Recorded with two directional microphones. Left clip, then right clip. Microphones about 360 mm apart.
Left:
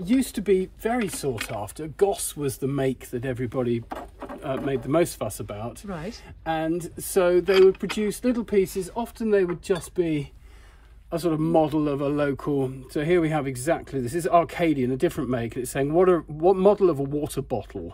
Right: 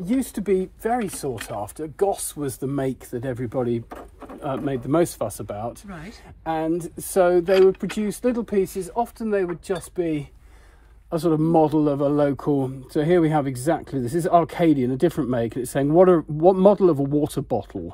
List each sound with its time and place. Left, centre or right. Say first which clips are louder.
0.1 s a man's voice: even; centre
5.9 s speech: left 5 dB; centre
6.7 s a man's voice: right 1 dB; centre
7.5 s speech: right 1 dB; centre
8.2 s a man's voice: right 2 dB; centre
8.9 s speech: even; centre
11.1 s a man's voice: right 4 dB; centre